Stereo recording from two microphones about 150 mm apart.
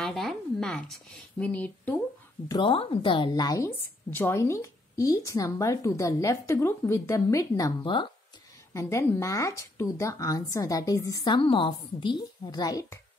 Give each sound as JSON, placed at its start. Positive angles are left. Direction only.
{"t": 0.0, "sound": "a sound", "side_deg": 0}
{"t": 1.4, "sound": "speech", "side_deg": 10}
{"t": 2.4, "sound": "a woman's voice", "side_deg": 30}
{"t": 3.7, "sound": "a woman's voice", "side_deg": 15}
{"t": 8.7, "sound": "a woman's voice", "side_deg": 20}